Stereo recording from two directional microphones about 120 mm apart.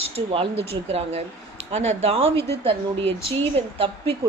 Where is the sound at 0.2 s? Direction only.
60° right (ahead or behind).